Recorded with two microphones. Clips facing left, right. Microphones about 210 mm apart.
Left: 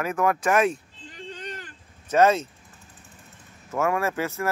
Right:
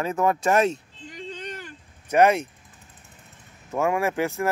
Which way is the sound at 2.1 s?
15° right (ahead or behind).